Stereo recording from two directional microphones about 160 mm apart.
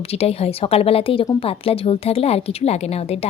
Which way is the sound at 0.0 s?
40° left (ahead or behind).